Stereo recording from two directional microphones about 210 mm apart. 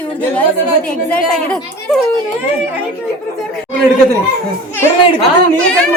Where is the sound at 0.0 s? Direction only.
10° left (ahead or behind).